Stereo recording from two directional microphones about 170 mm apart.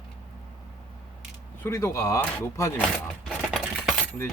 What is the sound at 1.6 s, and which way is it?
Speech, 15° left (ahead or behind).